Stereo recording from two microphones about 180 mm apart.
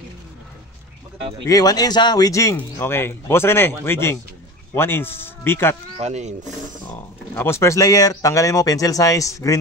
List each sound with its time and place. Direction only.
1.5 s speech: 20° left (ahead or behind)
5.9 s speech: 40° right (ahead or behind)
6.9 s speech: 10° left (ahead or behind)